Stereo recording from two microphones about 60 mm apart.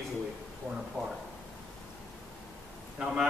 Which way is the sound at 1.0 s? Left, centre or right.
Centre.